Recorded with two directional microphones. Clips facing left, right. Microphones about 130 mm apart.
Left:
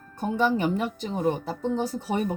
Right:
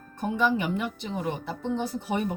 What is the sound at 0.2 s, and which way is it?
A woman's voice, 35° left (ahead or behind).